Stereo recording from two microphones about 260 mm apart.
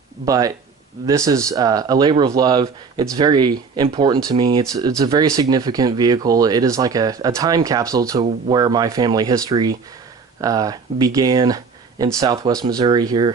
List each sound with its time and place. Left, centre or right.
0.3 s speech: centre